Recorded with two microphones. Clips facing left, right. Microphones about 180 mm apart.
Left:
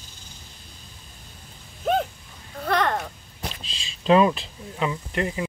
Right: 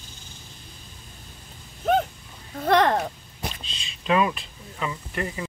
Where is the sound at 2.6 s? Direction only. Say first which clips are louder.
Right 4 dB; 35° right (ahead or behind).